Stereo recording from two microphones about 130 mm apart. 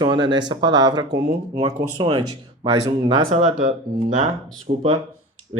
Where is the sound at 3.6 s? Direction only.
80° right.